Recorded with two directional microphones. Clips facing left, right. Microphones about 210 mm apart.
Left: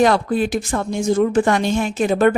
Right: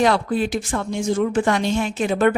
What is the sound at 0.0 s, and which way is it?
A woman's voice, 45° left (ahead or behind).